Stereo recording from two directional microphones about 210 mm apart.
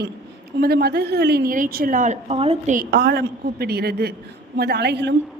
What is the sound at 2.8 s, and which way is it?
A woman's voice, 50° right (ahead or behind).